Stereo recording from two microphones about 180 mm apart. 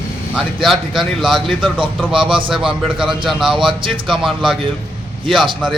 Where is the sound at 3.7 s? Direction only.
30° right (ahead or behind).